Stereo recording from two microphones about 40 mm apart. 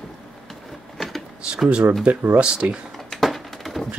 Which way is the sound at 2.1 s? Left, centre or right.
Right.